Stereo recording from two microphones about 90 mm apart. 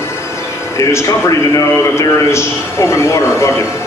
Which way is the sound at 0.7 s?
30° left (ahead or behind).